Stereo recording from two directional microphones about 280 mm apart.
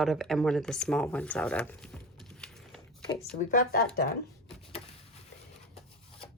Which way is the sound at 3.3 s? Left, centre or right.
Left.